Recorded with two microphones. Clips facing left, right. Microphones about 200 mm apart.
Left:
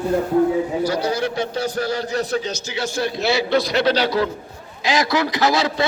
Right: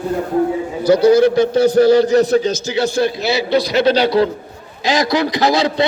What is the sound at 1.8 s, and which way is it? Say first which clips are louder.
Speech: right 13 dB; 80° right.